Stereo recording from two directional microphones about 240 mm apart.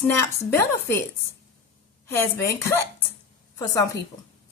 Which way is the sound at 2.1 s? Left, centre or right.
Centre.